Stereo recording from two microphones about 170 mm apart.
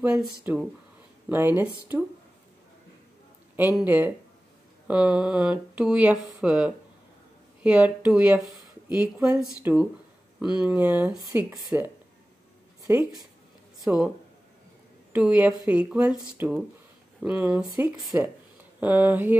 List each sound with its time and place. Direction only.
0.0 s speech: 5° right (ahead or behind)
3.7 s speech: 10° right (ahead or behind)
13.8 s speech: 5° right (ahead or behind)
15.1 s speech: 10° right (ahead or behind)